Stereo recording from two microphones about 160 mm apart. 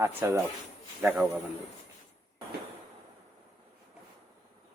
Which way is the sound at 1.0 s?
5° right (ahead or behind).